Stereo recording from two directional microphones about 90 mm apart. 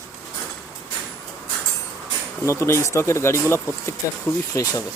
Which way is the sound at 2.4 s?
35° left (ahead or behind).